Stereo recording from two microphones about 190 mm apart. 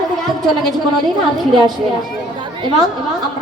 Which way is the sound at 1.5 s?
25° right (ahead or behind).